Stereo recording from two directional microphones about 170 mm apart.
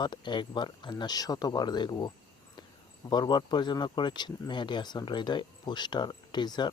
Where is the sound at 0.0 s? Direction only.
25° left (ahead or behind).